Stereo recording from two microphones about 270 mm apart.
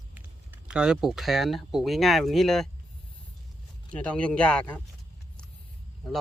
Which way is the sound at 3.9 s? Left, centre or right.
Centre.